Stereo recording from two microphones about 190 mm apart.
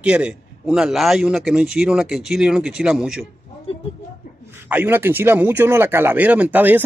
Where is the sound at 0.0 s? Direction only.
5° right (ahead or behind).